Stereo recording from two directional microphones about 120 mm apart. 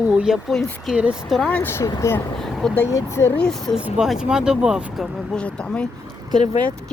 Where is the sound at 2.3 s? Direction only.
5° left (ahead or behind).